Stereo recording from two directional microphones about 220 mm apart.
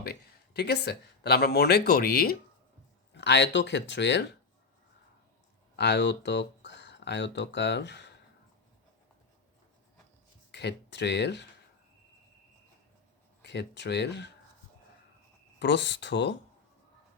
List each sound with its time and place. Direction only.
0.0 s speech: 45° left (ahead or behind)
5.7 s speech: 50° left (ahead or behind)
10.5 s speech: 50° left (ahead or behind)
13.4 s speech: 50° left (ahead or behind)
15.5 s speech: 50° left (ahead or behind)